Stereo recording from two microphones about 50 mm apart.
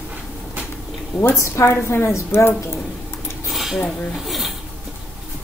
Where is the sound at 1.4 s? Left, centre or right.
Left.